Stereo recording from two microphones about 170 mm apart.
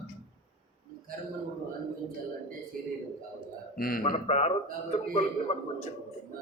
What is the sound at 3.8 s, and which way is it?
Speech, 55° left (ahead or behind).